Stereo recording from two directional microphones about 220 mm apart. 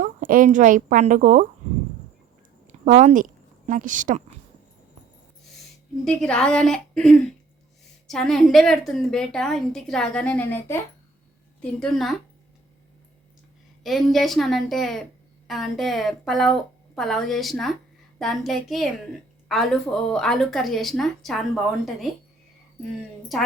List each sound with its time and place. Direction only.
0.0 s speech: 40° right (ahead or behind)
2.6 s speech: 35° right (ahead or behind)
6.1 s a woman's voice: 5° left (ahead or behind)
13.8 s a woman's voice: centre (ahead or behind)